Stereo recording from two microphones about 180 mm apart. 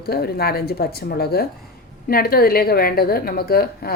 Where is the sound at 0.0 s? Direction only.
60° left (ahead or behind).